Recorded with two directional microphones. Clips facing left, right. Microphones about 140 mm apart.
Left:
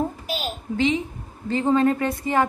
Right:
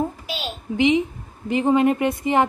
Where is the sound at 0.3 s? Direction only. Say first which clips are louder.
Left 1 dB; 40° left (ahead or behind).